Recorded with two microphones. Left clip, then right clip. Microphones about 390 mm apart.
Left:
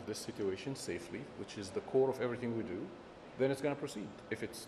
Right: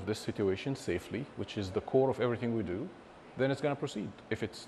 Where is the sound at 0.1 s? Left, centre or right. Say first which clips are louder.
Right 6 dB; right.